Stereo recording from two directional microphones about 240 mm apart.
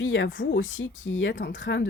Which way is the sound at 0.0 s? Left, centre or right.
Left.